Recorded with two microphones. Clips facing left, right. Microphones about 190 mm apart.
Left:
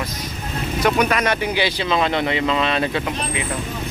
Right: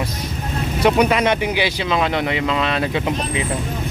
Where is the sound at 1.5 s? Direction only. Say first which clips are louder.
Even; 10° right (ahead or behind).